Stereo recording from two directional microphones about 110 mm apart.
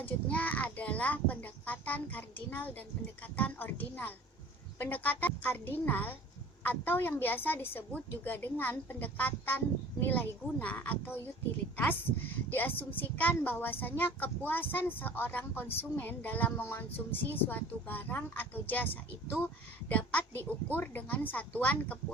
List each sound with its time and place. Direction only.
0.0 s a woman's voice: 15° left (ahead or behind)
19.9 s a woman's voice: 15° left (ahead or behind)